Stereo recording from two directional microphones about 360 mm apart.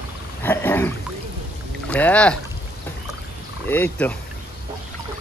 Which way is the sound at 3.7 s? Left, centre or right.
Centre.